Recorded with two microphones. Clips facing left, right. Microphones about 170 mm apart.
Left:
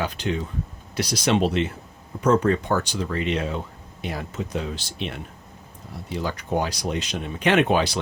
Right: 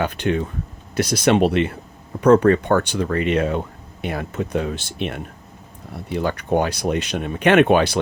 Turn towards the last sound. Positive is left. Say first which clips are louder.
# right 5 dB
turn(degrees=-60)  # may be behind; listen again after turning